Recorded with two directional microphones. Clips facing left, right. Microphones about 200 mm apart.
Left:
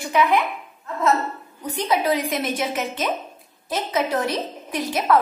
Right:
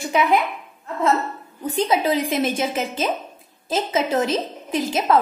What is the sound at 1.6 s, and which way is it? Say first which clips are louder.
A woman's voice: right 2 dB; 25° right (ahead or behind).